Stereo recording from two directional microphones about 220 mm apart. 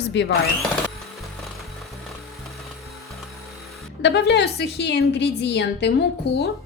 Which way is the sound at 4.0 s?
50° left (ahead or behind).